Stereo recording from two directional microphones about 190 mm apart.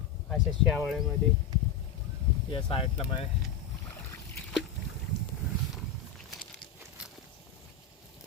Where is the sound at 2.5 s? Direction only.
30° left (ahead or behind).